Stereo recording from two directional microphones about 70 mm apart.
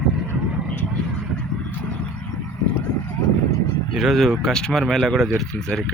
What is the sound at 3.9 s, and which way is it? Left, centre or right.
Speech, centre.